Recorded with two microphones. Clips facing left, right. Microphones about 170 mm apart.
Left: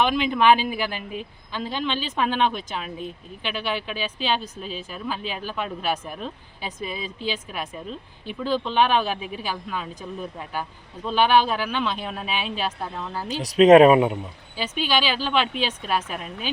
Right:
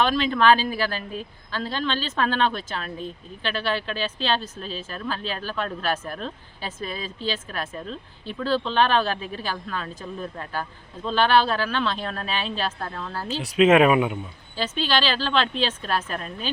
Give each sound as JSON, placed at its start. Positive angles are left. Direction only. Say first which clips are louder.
{"t": 0.0, "sound": "speech", "louder": "even", "side_deg": 15}
{"t": 13.4, "sound": "speech", "louder": "left 5 dB", "side_deg": 35}
{"t": 14.6, "sound": "speech", "louder": "even", "side_deg": 10}